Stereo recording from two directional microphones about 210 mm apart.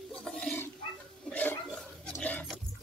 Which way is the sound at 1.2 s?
5° left (ahead or behind).